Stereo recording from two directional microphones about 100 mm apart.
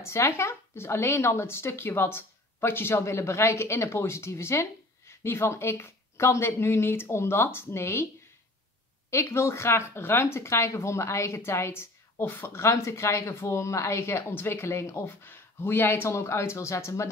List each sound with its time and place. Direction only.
0.0 s speech: 30° left (ahead or behind)
9.1 s speech: 25° left (ahead or behind)